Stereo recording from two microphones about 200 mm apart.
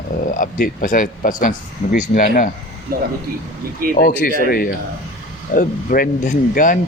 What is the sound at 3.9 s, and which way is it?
Speech, 45° left (ahead or behind).